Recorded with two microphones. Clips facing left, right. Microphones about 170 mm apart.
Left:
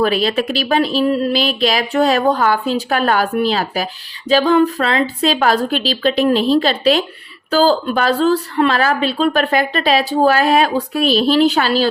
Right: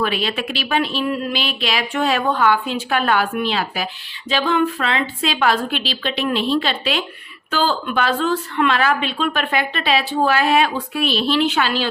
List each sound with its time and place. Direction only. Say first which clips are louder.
0.0 s a woman's voice: left 6 dB; 40° left (ahead or behind)